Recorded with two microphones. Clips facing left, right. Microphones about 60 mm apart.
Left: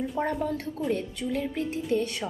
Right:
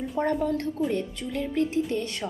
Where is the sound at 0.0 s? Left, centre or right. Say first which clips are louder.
Right 2 dB; centre.